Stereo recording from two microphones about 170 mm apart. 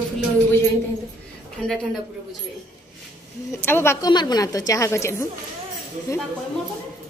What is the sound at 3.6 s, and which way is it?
A woman's voice, 15° left (ahead or behind).